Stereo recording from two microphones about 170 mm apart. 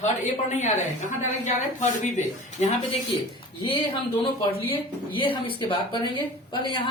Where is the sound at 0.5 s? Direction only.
45° left (ahead or behind).